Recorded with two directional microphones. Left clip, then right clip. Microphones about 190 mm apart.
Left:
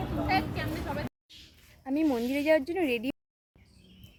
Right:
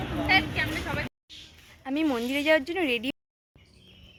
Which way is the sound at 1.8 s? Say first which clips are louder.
Right 1 dB; 10° left (ahead or behind).